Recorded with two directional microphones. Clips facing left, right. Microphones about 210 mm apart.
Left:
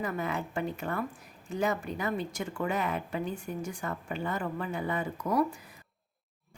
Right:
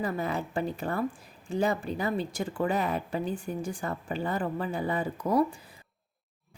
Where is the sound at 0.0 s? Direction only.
35° right (ahead or behind).